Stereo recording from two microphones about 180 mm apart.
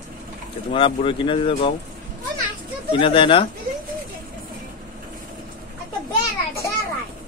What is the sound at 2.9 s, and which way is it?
Speech, 30° left (ahead or behind).